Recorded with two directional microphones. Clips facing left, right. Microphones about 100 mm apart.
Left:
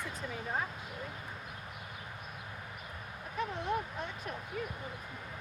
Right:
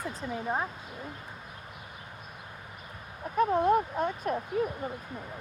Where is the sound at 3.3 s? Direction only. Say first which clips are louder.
Right 11 dB; 50° right (ahead or behind).